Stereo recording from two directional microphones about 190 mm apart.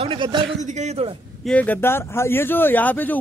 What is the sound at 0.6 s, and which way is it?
Speech, 40° right (ahead or behind).